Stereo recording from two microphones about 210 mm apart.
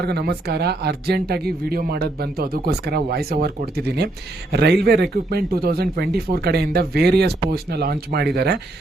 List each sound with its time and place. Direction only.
0.0 s speech: 50° right (ahead or behind)